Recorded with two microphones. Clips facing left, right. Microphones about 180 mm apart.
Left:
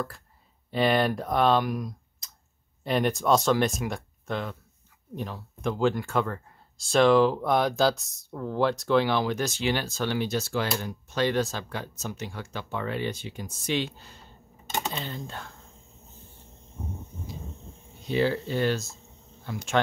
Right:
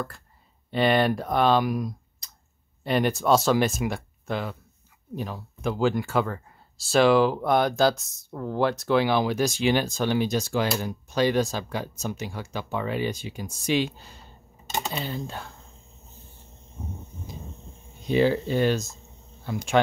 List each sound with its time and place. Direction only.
0.7 s speech: centre (ahead or behind)
2.2 s clicking: centre (ahead or behind)
2.8 s speech: centre (ahead or behind)
18.0 s speech: 15° right (ahead or behind)